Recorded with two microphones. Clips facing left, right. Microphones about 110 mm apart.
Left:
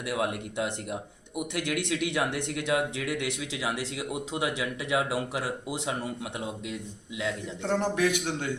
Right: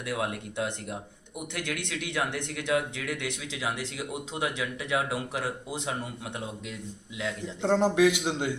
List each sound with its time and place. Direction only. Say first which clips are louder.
0.1 s speech: left 2 dB; 20° left (ahead or behind)
1.6 s a man's voice: left 3 dB; 25° right (ahead or behind)
2.6 s speech: even; 25° left (ahead or behind)
4.1 s speech: left 2 dB; 25° left (ahead or behind)
7.6 s a man's voice: right 4 dB; 20° right (ahead or behind)